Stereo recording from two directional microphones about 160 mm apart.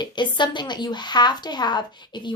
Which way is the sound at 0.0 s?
30° left (ahead or behind).